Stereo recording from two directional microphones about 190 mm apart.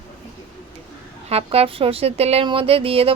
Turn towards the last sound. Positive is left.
turn(degrees=-30)  # may be behind; listen again after turning